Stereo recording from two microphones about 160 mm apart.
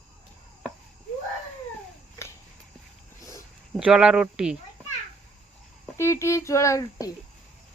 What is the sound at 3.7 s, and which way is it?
Speech, 5° right (ahead or behind).